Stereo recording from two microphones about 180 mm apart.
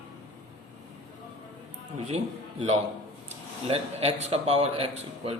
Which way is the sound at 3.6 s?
35° right (ahead or behind).